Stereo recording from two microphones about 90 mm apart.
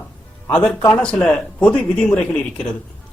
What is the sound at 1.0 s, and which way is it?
A man's voice, 10° left (ahead or behind).